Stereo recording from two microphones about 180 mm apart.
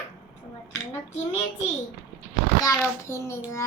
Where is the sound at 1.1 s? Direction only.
40° left (ahead or behind).